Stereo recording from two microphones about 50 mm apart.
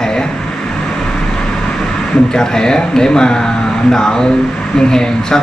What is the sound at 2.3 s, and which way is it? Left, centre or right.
A man's voice, centre.